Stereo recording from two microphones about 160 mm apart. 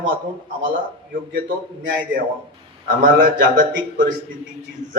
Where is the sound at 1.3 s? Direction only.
60° right (ahead or behind).